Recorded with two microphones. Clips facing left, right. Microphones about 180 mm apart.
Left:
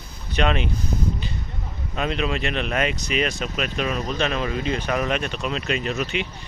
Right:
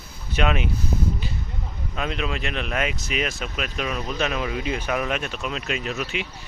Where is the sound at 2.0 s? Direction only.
Centre (ahead or behind).